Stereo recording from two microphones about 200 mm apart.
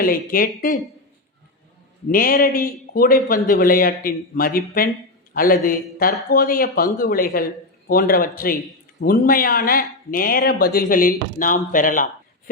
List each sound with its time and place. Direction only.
0.0 s speech: 45° left (ahead or behind)
2.0 s speech: 45° left (ahead or behind)